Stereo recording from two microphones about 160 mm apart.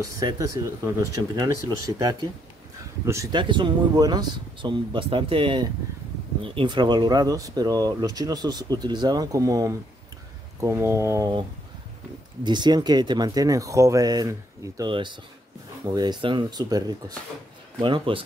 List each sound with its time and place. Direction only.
0.2 s speech: 20° right (ahead or behind)
12.4 s speech: 25° right (ahead or behind)